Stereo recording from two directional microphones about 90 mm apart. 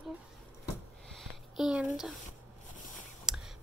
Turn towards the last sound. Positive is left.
turn(degrees=-5)  # may be behind; listen again after turning